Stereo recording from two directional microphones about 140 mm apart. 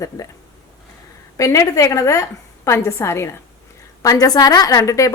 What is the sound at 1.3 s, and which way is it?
A woman's voice, 20° left (ahead or behind).